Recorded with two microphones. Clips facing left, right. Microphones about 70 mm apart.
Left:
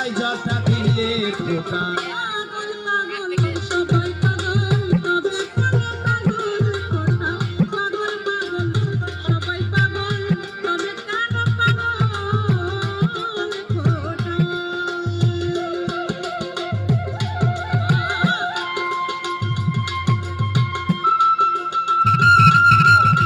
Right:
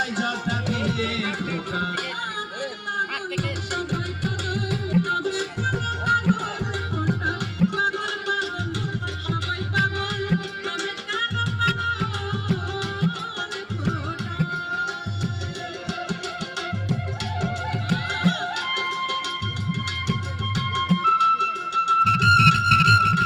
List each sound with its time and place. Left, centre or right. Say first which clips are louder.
0.0 s music: left 3 dB; left
14.8 s music: left 7 dB; left
17.4 s music: left 7 dB; left
20.6 s music: left 1 dB; left